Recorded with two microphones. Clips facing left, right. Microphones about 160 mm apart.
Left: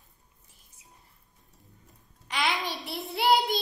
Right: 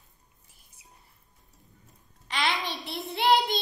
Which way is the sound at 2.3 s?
5° left (ahead or behind).